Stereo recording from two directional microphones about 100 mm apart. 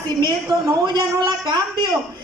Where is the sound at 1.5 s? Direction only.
45° right (ahead or behind).